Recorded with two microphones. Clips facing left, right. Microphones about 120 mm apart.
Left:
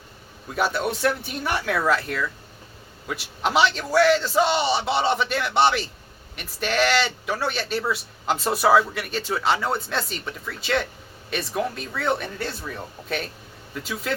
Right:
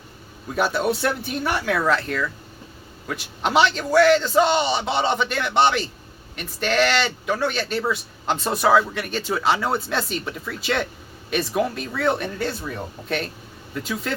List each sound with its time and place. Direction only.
0.5 s speech: centre (ahead or behind)
13.7 s speech: centre (ahead or behind)